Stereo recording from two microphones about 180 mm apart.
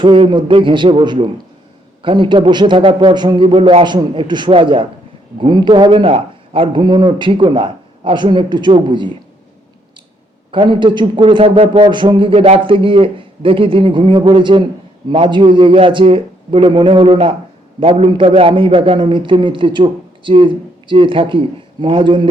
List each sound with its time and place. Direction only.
0.0 s a man's voice: 25° right (ahead or behind)
10.5 s a man's voice: 25° right (ahead or behind)